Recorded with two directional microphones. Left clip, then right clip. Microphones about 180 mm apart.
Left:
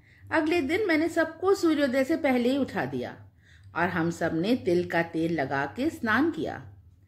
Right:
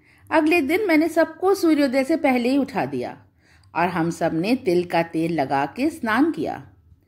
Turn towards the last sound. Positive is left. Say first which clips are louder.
# right 5 dB
turn(degrees=-25)  # may be behind; listen again after turning